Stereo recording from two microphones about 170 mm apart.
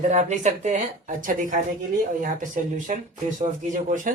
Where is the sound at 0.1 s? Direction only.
45° right (ahead or behind).